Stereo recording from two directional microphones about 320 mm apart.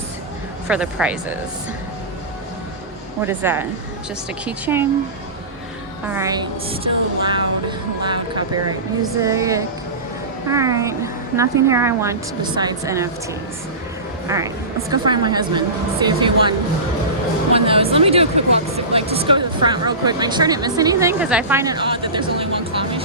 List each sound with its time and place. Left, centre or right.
0.7 s speech: centre
3.2 s speech: centre
6.1 s speech: centre
14.3 s speech: centre
17.5 s music: centre
17.9 s speech: centre